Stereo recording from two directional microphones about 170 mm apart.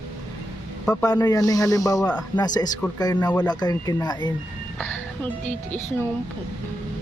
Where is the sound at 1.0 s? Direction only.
20° left (ahead or behind).